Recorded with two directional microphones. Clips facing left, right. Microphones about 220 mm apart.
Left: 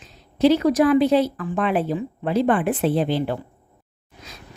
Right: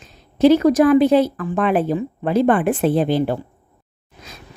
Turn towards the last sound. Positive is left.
turn(degrees=-45)  # may be behind; listen again after turning